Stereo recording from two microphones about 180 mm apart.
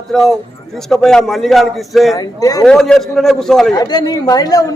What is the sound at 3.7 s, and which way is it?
Speech, 20° left (ahead or behind).